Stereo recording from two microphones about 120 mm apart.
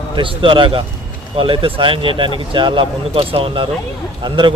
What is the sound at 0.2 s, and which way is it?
A man's voice, 45° right (ahead or behind).